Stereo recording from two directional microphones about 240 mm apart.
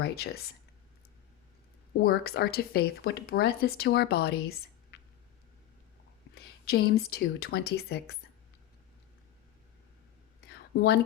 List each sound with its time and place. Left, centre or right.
0.0 s speech: left
2.0 s speech: left
6.3 s speech: left
10.4 s a sound: left